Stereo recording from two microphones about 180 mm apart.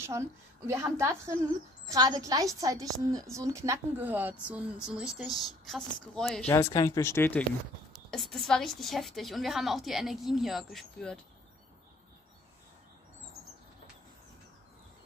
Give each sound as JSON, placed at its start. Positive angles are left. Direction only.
{"t": 0.7, "sound": "a woman's voice", "side_deg": -15}
{"t": 6.5, "sound": "speech", "side_deg": 20}
{"t": 8.1, "sound": "a woman's voice", "side_deg": 0}